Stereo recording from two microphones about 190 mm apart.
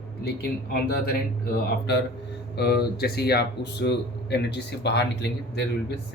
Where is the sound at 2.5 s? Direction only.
55° left (ahead or behind).